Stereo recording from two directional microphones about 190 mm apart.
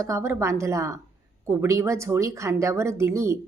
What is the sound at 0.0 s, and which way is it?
Speech, 15° right (ahead or behind).